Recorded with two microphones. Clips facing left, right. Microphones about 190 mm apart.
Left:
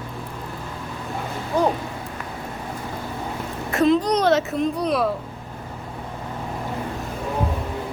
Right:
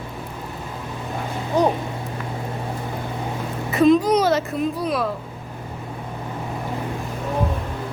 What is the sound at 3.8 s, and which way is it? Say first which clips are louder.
Speech: right 3 dB; 15° right (ahead or behind).